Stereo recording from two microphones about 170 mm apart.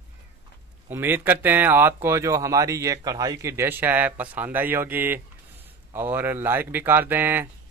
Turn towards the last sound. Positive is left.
turn(degrees=-10)  # may be behind; listen again after turning